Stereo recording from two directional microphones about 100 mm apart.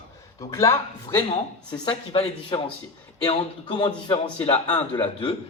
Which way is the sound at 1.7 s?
45° left (ahead or behind).